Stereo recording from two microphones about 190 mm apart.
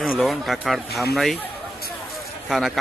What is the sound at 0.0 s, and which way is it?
Speech, centre (ahead or behind).